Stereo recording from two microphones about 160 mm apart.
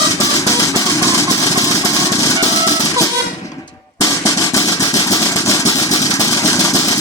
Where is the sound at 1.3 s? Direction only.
25° left (ahead or behind).